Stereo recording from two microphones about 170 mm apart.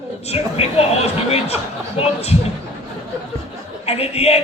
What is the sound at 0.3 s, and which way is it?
A man's voice, 35° left (ahead or behind).